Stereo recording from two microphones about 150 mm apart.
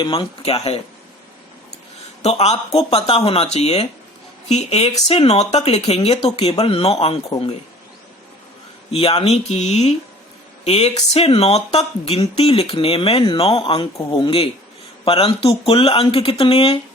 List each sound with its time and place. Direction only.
0.0 s speech: 30° left (ahead or behind)
2.2 s speech: 45° left (ahead or behind)
8.9 s speech: 40° left (ahead or behind)